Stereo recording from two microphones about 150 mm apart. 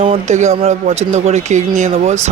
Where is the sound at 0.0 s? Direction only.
50° right (ahead or behind).